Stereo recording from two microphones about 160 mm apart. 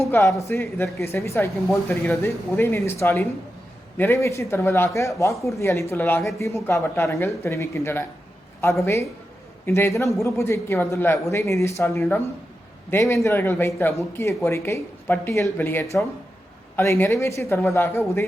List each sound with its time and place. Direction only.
0.0 s speech: 20° left (ahead or behind)